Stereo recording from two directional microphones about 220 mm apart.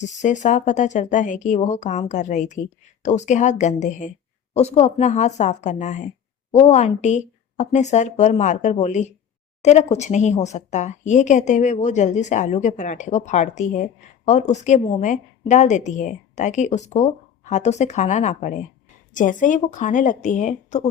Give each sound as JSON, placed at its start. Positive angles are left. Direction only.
{"t": 0.0, "sound": "speech", "side_deg": 35}